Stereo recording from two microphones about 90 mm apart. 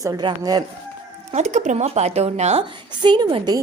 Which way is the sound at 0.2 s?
55° right (ahead or behind).